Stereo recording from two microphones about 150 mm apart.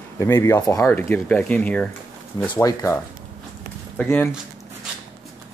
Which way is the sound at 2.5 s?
20° left (ahead or behind).